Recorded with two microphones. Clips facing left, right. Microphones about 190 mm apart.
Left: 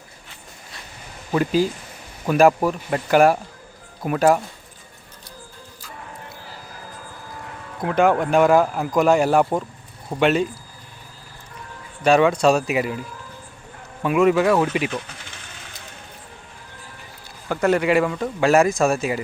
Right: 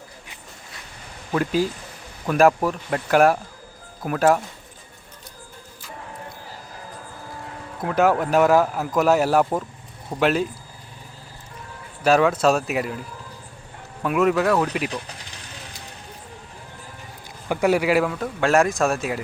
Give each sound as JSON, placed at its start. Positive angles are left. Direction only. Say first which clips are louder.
{"t": 1.3, "sound": "speech", "louder": "left 2 dB", "side_deg": 0}
{"t": 7.8, "sound": "speech", "louder": "left 1 dB", "side_deg": -5}
{"t": 12.0, "sound": "speech", "louder": "left 2 dB", "side_deg": -5}
{"t": 14.0, "sound": "speech", "louder": "left 3 dB", "side_deg": 0}
{"t": 14.8, "sound": "a sound", "louder": "left 2 dB", "side_deg": -35}
{"t": 17.5, "sound": "speech", "louder": "left 1 dB", "side_deg": -10}